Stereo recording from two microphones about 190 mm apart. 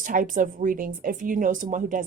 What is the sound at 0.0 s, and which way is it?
A woman's voice, 45° right (ahead or behind).